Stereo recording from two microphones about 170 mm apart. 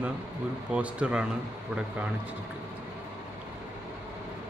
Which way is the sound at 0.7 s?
5° right (ahead or behind).